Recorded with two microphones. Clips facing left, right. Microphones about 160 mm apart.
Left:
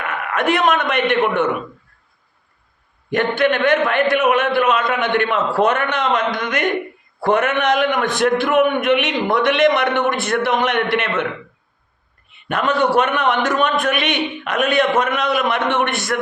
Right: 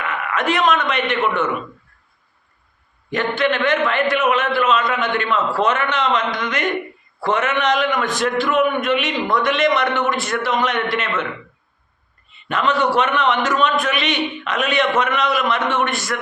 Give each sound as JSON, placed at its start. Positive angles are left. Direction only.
{"t": 0.0, "sound": "a man's voice", "side_deg": 50}
{"t": 3.1, "sound": "a man's voice", "side_deg": 55}
{"t": 12.3, "sound": "a man's voice", "side_deg": 55}